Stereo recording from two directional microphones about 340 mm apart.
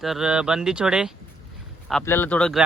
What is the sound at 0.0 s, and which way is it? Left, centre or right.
Speech, centre.